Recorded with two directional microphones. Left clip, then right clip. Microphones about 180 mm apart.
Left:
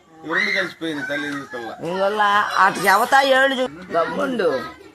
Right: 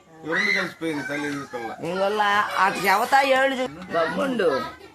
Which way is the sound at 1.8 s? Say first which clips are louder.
Left 4 dB; 35° left (ahead or behind).